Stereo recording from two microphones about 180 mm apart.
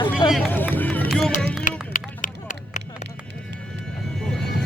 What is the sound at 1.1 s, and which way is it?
Music, 5° left (ahead or behind).